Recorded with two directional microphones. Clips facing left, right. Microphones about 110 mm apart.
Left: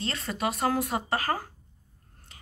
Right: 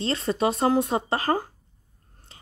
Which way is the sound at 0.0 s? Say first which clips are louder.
Right 7 dB; 30° right (ahead or behind).